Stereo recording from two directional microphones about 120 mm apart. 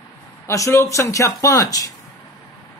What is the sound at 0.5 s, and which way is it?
A man's voice, 25° left (ahead or behind).